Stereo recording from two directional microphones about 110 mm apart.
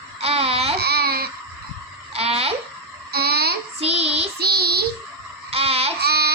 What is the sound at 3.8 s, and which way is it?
Child singing, 65° right (ahead or behind).